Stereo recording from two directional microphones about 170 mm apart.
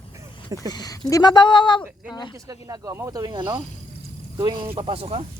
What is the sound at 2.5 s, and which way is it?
Speech, 20° right (ahead or behind).